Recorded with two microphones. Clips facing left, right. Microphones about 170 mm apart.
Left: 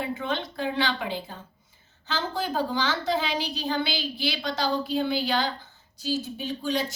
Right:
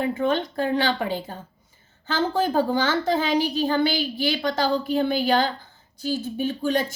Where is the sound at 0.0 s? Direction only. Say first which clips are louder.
Right 7 dB; 50° right (ahead or behind).